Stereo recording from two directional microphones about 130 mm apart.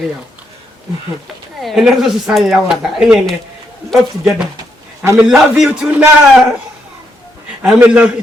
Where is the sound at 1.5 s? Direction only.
Centre (ahead or behind).